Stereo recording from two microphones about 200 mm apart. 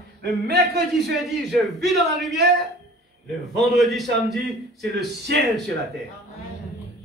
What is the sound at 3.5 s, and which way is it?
Speech, centre (ahead or behind).